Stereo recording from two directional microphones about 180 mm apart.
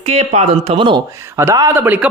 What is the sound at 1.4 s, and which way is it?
Speech, 15° right (ahead or behind).